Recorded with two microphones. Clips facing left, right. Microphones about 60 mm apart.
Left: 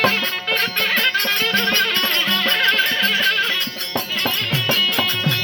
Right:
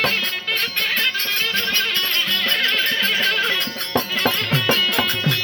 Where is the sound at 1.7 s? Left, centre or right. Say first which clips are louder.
Left 3 dB; left.